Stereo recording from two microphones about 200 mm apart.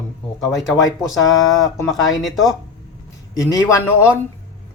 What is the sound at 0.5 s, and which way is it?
Speech, centre (ahead or behind).